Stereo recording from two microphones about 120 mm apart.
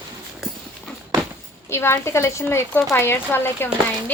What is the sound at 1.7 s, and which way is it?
Speech, 20° left (ahead or behind).